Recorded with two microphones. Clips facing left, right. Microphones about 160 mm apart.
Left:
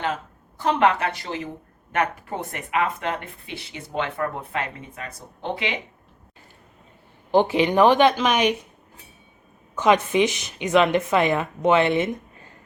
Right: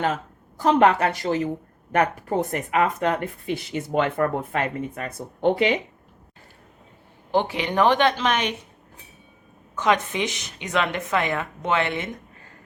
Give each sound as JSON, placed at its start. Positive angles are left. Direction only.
{"t": 0.6, "sound": "a woman's voice", "side_deg": -40}
{"t": 7.3, "sound": "speech", "side_deg": 15}
{"t": 9.8, "sound": "a woman's voice", "side_deg": 20}